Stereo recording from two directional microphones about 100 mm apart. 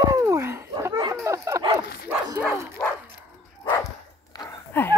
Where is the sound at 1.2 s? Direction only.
30° right (ahead or behind).